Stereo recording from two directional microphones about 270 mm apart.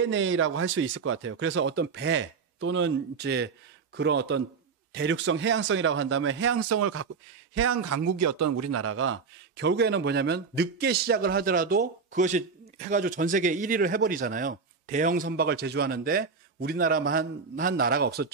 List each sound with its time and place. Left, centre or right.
0.0 s speech: right
8.0 s a man's voice: right